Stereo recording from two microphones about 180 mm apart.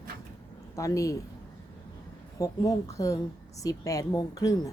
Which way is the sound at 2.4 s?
20° left (ahead or behind).